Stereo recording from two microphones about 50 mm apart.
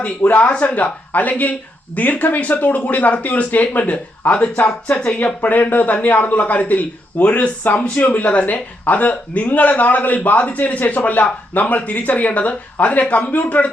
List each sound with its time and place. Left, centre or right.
0.2 s a man's voice: left
5.2 s a man's voice: left